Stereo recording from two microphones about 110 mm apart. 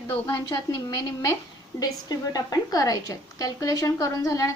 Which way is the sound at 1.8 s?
35° left (ahead or behind).